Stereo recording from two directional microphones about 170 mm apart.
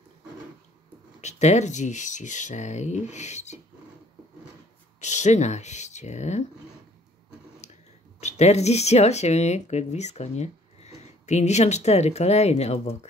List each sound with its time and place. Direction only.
1.2 s speech: 40° left (ahead or behind)
5.0 s speech: 45° left (ahead or behind)
7.6 s whispering: 40° left (ahead or behind)
8.2 s speech: 40° left (ahead or behind)